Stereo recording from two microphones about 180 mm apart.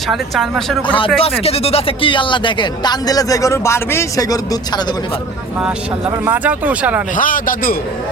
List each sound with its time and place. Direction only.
0.1 s speech: centre (ahead or behind)
0.9 s speech: 30° left (ahead or behind)
6.2 s speech: 10° right (ahead or behind)
7.2 s a man's voice: 50° left (ahead or behind)